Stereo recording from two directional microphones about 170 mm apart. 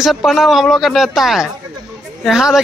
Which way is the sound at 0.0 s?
Centre (ahead or behind).